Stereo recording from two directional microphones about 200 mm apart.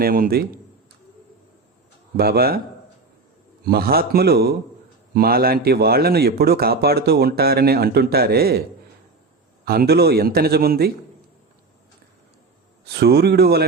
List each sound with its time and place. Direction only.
0.0 s speech: 45° right (ahead or behind)
2.1 s speech: 50° right (ahead or behind)
3.6 s speech: 50° right (ahead or behind)
9.6 s speech: 50° right (ahead or behind)
12.9 s speech: 55° right (ahead or behind)